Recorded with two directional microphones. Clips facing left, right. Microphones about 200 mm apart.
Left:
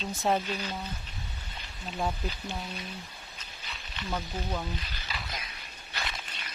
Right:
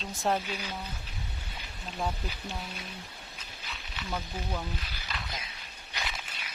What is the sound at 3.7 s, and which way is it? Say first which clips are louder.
Snake: left 2 dB; centre (ahead or behind).